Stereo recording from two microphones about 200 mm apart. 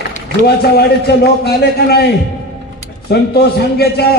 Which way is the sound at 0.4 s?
55° left (ahead or behind).